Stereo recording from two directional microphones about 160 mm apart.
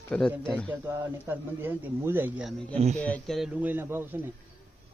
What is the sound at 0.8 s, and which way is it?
Speech, 15° right (ahead or behind).